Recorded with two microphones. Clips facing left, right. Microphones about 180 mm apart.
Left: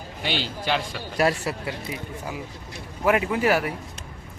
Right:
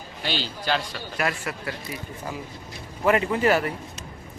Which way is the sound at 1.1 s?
35° left (ahead or behind).